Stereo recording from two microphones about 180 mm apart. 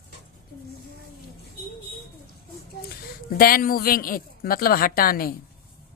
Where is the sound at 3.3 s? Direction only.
55° left (ahead or behind).